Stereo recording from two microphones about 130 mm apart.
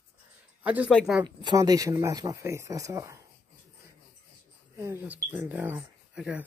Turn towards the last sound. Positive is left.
turn(degrees=-10)  # may be behind; listen again after turning